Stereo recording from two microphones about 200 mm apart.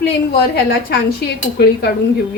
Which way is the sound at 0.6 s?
50° left (ahead or behind).